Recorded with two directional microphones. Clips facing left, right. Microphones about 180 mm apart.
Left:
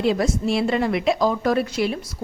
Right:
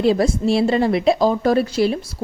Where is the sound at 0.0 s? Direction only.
35° right (ahead or behind).